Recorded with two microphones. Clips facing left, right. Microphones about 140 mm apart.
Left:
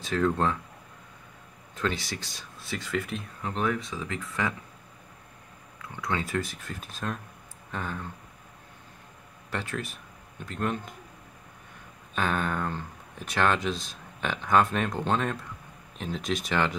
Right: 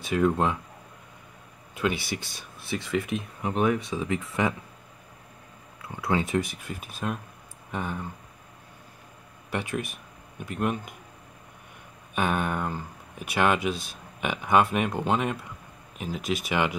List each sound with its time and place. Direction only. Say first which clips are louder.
0.0 s speech: right 2 dB; 15° right (ahead or behind)
1.8 s speech: right 3 dB; 10° right (ahead or behind)
5.8 s speech: right 5 dB; 30° right (ahead or behind)
6.3 s speech: right 4 dB; 15° right (ahead or behind)
9.5 s speech: right 3 dB; 15° right (ahead or behind)
12.2 s speech: right 2 dB; 15° right (ahead or behind)